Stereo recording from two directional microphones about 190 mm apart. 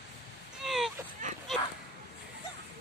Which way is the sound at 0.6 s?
Centre (ahead or behind).